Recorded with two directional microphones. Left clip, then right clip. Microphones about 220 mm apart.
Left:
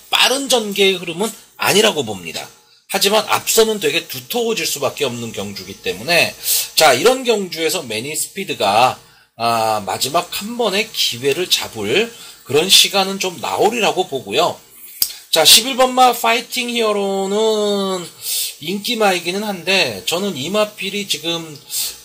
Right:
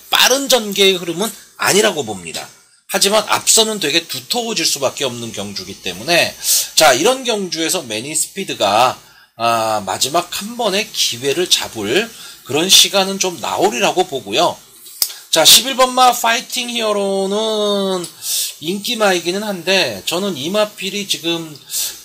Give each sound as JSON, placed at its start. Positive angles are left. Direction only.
{"t": 0.1, "sound": "speech", "side_deg": -30}
{"t": 2.9, "sound": "speech", "side_deg": -25}